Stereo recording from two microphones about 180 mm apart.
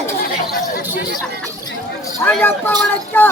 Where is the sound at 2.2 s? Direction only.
10° left (ahead or behind).